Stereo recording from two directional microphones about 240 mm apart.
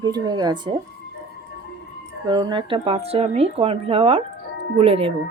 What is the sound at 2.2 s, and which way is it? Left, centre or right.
Speech, centre.